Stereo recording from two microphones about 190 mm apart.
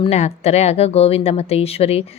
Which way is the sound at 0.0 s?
35° left (ahead or behind).